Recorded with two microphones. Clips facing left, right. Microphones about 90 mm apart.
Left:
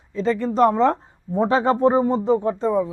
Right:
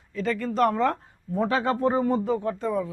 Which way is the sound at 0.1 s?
25° left (ahead or behind).